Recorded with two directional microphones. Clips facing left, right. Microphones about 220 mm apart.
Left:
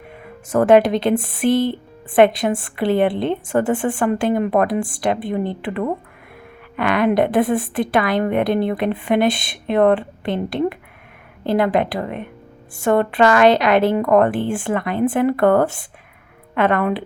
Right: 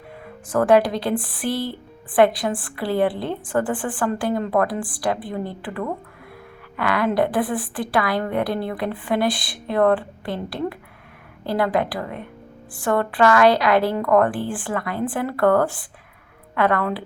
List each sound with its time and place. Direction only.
0.5 s a woman's voice: 25° left (ahead or behind)